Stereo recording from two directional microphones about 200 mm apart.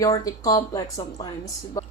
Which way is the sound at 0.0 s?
15° left (ahead or behind).